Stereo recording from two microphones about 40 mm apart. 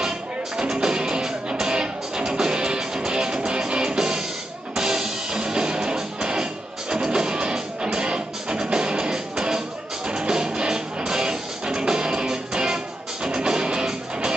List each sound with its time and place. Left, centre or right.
0.6 s music: centre